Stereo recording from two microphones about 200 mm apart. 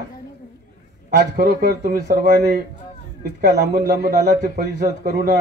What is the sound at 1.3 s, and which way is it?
Speech, 50° right (ahead or behind).